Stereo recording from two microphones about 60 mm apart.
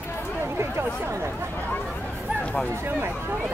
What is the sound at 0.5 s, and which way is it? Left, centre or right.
Speech, right.